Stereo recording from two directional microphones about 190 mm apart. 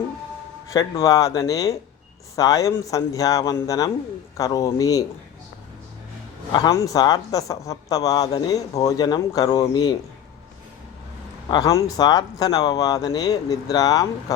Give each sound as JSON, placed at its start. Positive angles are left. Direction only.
{"t": 0.7, "sound": "speech", "side_deg": 20}
{"t": 6.5, "sound": "speech", "side_deg": 20}
{"t": 11.5, "sound": "speech", "side_deg": 20}